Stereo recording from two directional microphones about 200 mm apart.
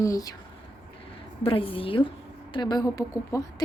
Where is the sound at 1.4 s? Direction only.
25° left (ahead or behind).